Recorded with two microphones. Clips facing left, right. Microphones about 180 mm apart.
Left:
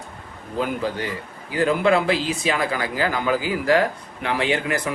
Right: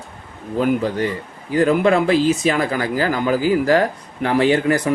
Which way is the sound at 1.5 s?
40° right (ahead or behind).